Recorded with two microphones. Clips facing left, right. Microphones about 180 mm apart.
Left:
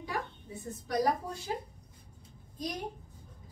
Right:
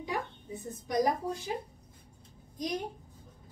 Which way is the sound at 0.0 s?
15° right (ahead or behind).